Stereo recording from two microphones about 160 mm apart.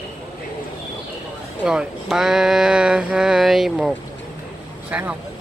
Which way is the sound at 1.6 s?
5° right (ahead or behind).